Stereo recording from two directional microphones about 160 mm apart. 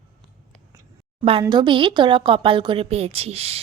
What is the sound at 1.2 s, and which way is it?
Speech, 35° right (ahead or behind).